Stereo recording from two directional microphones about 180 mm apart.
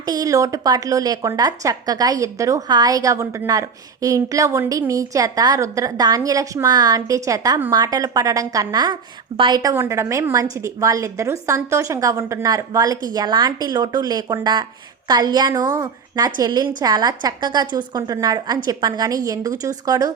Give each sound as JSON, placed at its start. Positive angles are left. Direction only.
{"t": 0.0, "sound": "a woman's voice", "side_deg": -20}